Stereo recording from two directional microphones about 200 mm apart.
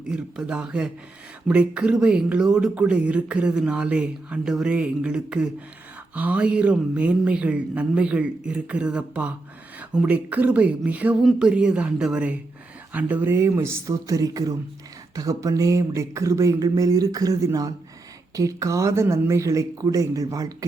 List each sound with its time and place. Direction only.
0.1 s speech: 5° right (ahead or behind)